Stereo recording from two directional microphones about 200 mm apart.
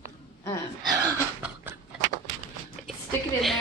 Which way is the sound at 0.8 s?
20° right (ahead or behind).